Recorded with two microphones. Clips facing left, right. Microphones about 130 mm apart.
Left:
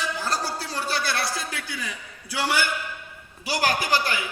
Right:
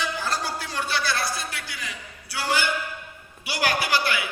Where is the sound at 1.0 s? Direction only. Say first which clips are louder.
Even; 75° left (ahead or behind).